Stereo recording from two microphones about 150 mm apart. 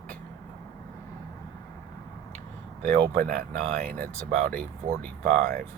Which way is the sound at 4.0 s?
75° right (ahead or behind).